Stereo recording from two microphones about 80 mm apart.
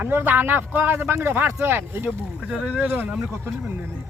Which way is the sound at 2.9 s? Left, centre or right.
Right.